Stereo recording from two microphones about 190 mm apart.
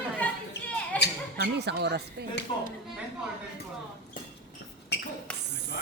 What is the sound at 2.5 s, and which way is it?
Speech, 25° left (ahead or behind).